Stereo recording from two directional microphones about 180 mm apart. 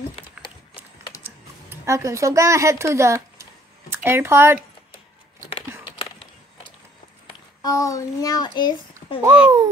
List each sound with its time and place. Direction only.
1.2 s speech: 15° right (ahead or behind)
7.6 s a child's voice: 20° left (ahead or behind)
9.2 s speech: 20° right (ahead or behind)